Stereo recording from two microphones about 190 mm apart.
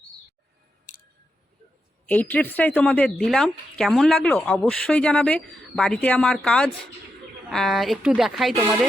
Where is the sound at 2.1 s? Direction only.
10° left (ahead or behind).